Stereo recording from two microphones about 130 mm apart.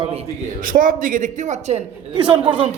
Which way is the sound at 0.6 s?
90° right.